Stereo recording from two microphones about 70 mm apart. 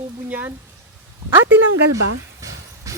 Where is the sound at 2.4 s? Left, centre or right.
Right.